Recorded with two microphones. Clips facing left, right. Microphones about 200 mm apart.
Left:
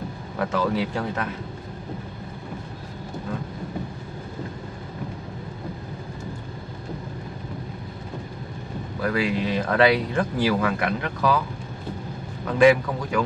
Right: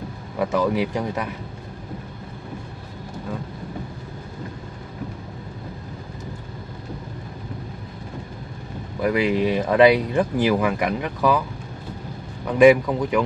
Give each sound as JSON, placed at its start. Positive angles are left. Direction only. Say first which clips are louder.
{"t": 0.4, "sound": "speech", "louder": "right 3 dB", "side_deg": -15}
{"t": 9.0, "sound": "speech", "louder": "right 4 dB", "side_deg": -20}
{"t": 12.4, "sound": "speech", "louder": "right 3 dB", "side_deg": -15}